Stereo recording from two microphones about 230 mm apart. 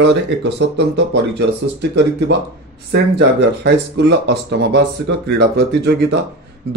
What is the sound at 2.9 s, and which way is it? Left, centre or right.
Speech, right.